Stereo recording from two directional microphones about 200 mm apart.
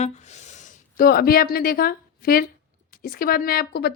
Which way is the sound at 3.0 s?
45° left (ahead or behind).